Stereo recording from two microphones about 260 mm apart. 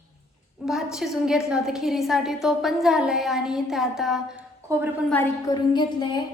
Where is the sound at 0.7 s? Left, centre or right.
Centre.